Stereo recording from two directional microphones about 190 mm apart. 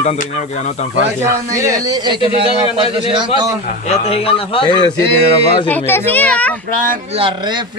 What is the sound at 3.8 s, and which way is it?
A man's voice, 35° left (ahead or behind).